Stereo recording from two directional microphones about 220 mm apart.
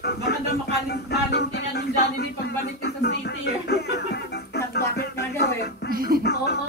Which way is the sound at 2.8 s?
45° left (ahead or behind).